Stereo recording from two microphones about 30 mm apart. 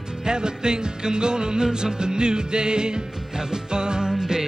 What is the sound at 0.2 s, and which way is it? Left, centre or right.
Music, right.